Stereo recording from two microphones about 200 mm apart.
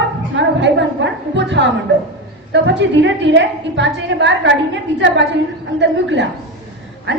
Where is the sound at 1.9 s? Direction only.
60° right (ahead or behind).